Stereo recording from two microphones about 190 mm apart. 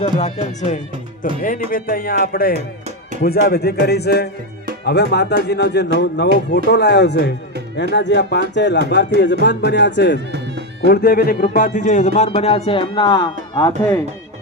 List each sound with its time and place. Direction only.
0.0 s a man's voice: 35° left (ahead or behind); by 10.2 s 65° left (ahead or behind)
10.8 s a man's voice: 55° left (ahead or behind); by 13.7 s 25° left (ahead or behind)